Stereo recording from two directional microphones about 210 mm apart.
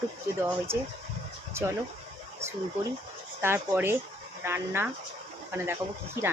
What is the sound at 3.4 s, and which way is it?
Speech, 10° right (ahead or behind).